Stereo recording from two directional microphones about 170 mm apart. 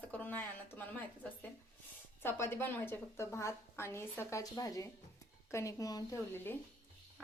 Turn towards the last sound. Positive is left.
turn(degrees=15)  # may be behind; listen again after turning